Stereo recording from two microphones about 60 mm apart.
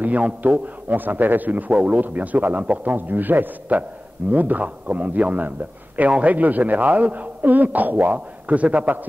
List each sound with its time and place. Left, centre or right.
0.0 s a man's voice: right